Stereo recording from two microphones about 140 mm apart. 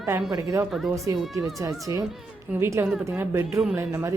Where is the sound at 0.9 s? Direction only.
25° right (ahead or behind).